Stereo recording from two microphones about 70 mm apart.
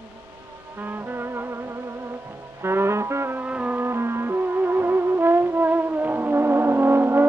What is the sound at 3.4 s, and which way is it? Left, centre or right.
Music, centre.